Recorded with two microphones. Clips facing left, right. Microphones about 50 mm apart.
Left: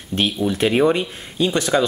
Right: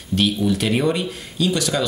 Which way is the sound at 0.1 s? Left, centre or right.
Left.